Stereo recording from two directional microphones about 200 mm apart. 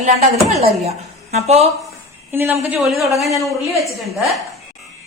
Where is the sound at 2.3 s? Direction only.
10° right (ahead or behind).